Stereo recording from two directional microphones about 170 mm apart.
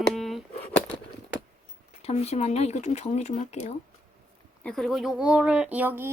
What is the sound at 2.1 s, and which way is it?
Speech, 40° left (ahead or behind).